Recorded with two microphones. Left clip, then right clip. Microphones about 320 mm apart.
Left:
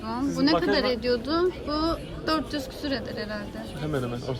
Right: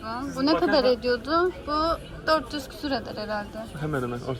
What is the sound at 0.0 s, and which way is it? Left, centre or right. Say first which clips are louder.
Speech: left 1 dB; centre.